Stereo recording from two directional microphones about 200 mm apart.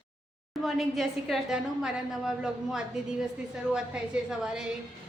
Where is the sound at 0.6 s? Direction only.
Centre (ahead or behind).